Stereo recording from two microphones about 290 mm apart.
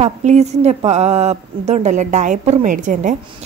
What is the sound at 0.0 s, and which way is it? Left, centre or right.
Speech, right.